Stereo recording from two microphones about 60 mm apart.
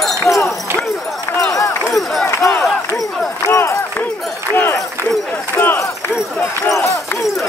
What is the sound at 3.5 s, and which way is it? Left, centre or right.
Run, left.